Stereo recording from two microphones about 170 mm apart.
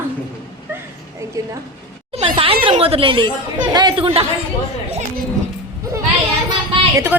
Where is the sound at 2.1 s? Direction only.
35° right (ahead or behind).